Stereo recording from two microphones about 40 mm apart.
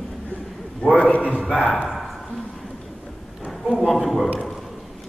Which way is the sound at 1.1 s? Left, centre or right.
Left.